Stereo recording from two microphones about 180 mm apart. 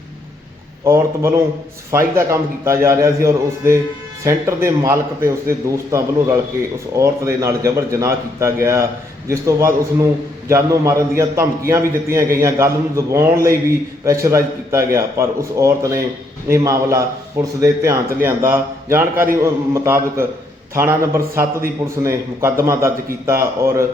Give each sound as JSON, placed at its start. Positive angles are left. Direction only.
{"t": 0.9, "sound": "a man's voice", "side_deg": -15}